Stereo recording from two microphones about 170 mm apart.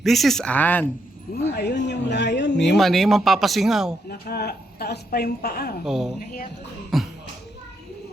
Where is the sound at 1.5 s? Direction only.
80° left.